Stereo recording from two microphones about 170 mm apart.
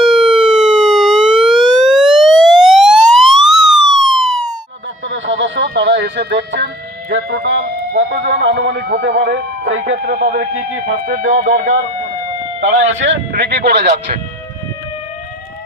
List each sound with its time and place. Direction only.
0.0 s siren: 5° right (ahead or behind)
5.0 s a sound: 90° right
7.2 s speech: 75° right (ahead or behind)
8.5 s speech: 90° right
10.0 s speech: 70° right (ahead or behind); by 11.8 s 55° right (ahead or behind)
12.5 s speech: 90° right; by 14.2 s 70° right (ahead or behind)